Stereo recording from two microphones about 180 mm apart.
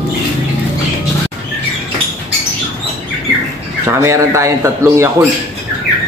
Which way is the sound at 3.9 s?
15° right (ahead or behind).